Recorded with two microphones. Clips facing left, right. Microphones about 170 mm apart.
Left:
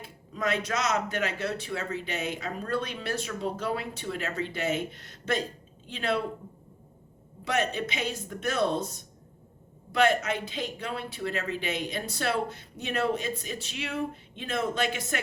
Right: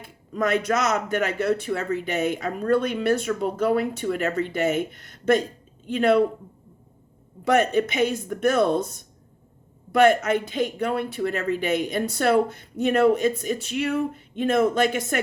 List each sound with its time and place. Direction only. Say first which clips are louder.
0.3 s speech: right 7 dB; 50° right (ahead or behind)
7.4 s speech: right 9 dB; 50° right (ahead or behind)
9.9 s speech: right 7 dB; 50° right (ahead or behind)